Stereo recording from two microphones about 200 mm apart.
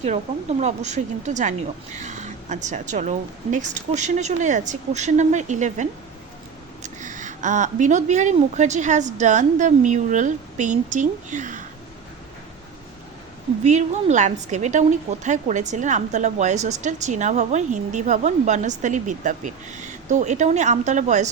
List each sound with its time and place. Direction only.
0.6 s speech: 35° right (ahead or behind)
13.7 s speech: 35° right (ahead or behind)